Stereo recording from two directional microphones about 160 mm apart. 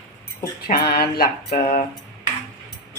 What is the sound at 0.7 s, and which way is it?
Mantra, 75° left (ahead or behind).